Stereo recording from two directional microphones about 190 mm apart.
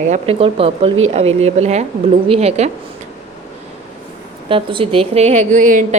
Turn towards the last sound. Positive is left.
turn(degrees=-45)  # may be behind; listen again after turning